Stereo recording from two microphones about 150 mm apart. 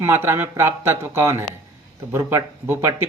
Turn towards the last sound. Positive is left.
turn(degrees=-15)  # may be behind; listen again after turning